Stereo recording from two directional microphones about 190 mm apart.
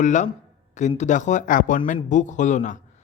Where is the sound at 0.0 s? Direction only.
40° left (ahead or behind).